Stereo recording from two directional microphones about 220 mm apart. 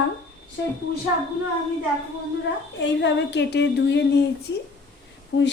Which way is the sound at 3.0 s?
50° left (ahead or behind).